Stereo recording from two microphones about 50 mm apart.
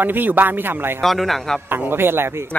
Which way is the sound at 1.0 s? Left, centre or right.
Centre.